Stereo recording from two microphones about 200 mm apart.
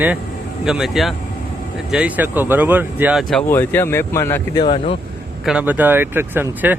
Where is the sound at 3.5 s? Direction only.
10° left (ahead or behind).